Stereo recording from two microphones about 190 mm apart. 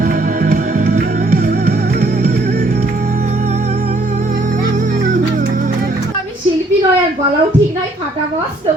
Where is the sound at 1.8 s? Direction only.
55° right (ahead or behind).